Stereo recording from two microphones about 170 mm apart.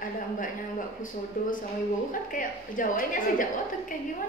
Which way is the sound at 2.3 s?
50° left (ahead or behind).